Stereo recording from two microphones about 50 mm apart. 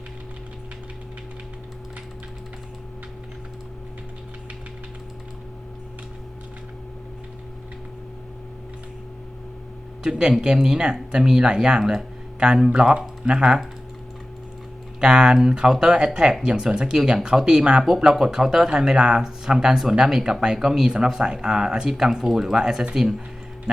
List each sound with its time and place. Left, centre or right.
10.0 s speech: centre
15.0 s speech: centre